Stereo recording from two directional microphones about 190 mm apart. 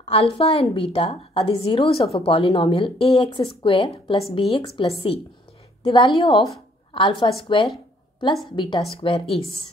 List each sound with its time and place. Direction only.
0.1 s a woman's voice: 30° left (ahead or behind)